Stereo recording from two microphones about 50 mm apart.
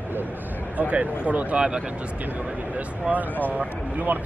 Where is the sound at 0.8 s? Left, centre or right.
Right.